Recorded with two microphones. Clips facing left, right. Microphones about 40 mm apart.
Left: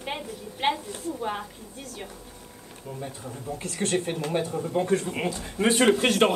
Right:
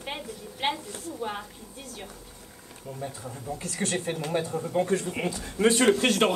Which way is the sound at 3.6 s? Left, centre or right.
Left.